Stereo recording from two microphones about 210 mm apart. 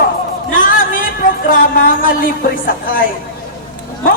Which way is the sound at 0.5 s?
40° left (ahead or behind).